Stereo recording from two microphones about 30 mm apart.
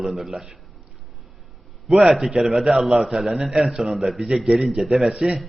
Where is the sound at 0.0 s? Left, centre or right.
Centre.